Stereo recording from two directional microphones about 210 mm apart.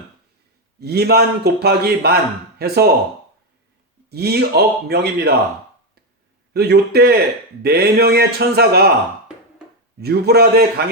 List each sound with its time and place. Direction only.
0.8 s a man's voice: 50° right (ahead or behind)
4.1 s a man's voice: 50° right (ahead or behind)
6.5 s a man's voice: 50° right (ahead or behind)
10.0 s a man's voice: 50° right (ahead or behind)